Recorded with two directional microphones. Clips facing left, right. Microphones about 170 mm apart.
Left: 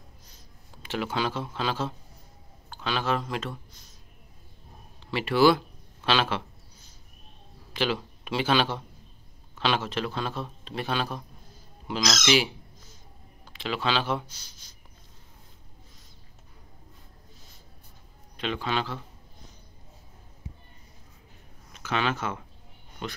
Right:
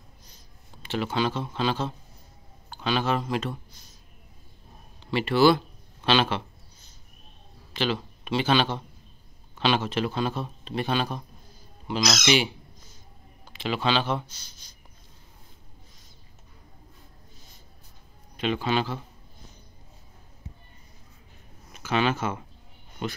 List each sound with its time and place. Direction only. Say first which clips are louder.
0.8 s a man's voice: right 2 dB; 5° left (ahead or behind)
5.0 s a man's voice: right 1 dB; 5° left (ahead or behind)
7.7 s a man's voice: even; 10° left (ahead or behind)
18.3 s a man's voice: right 4 dB; 5° right (ahead or behind)
21.7 s speech: right 3 dB; 5° right (ahead or behind)